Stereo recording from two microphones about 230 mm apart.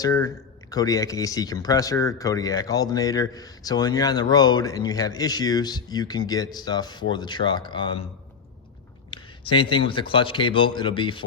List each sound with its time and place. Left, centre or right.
0.0 s speech: centre
9.0 s speech: left